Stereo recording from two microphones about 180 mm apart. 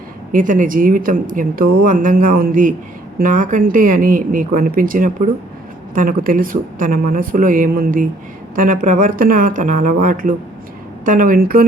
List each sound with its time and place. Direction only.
0.3 s a woman's voice: 45° right (ahead or behind)